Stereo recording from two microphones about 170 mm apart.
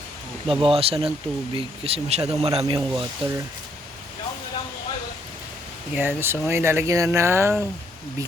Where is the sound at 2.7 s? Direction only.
20° right (ahead or behind).